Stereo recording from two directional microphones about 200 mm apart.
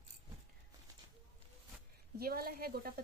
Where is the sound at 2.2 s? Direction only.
50° right (ahead or behind).